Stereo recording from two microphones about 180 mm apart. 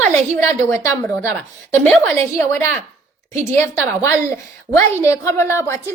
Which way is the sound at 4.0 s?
15° left (ahead or behind).